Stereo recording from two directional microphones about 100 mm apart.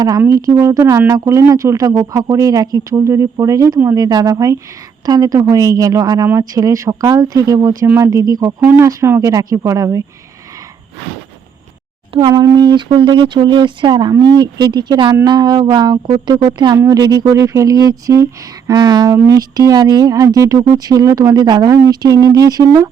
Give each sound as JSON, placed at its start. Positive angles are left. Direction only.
{"t": 0.3, "sound": "speech", "side_deg": -35}
{"t": 8.6, "sound": "speech", "side_deg": -25}
{"t": 12.3, "sound": "speech", "side_deg": -35}
{"t": 12.5, "sound": "speech", "side_deg": -50}
{"t": 16.7, "sound": "speech", "side_deg": -35}
{"t": 18.7, "sound": "speech", "side_deg": -45}